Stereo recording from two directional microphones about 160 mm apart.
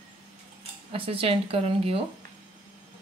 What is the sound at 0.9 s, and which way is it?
Speech, 35° right (ahead or behind).